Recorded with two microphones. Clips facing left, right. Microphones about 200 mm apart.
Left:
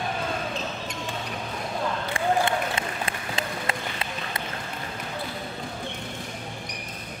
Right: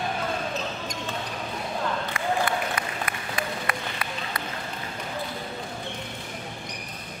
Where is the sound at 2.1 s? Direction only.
25° left (ahead or behind).